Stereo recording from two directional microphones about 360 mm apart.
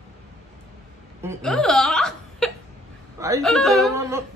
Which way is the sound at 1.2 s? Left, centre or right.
Centre.